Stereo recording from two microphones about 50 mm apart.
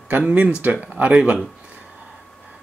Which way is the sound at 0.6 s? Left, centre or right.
Right.